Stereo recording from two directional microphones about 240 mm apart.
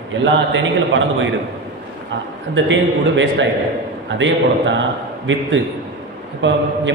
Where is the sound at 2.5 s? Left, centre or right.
Right.